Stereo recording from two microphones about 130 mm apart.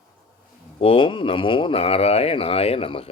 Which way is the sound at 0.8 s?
45° left (ahead or behind).